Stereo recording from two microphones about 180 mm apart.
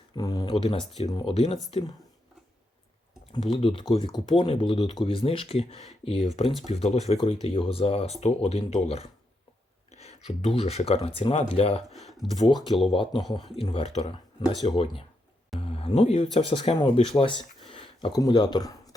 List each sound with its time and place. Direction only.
0.2 s speech: 20° left (ahead or behind)
1.7 s speech: 20° left (ahead or behind)
3.3 s speech: 30° left (ahead or behind)
11.9 s speech: centre (ahead or behind)
12.5 s speech: 25° left (ahead or behind)